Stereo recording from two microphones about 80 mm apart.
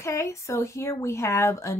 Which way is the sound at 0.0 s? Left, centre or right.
Left.